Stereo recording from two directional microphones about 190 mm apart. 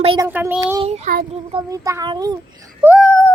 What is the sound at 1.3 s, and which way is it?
A child's voice, 25° right (ahead or behind).